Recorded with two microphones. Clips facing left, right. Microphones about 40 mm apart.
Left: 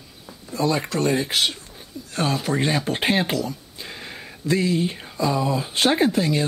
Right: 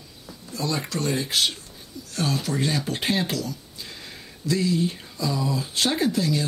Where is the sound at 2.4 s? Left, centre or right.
Left.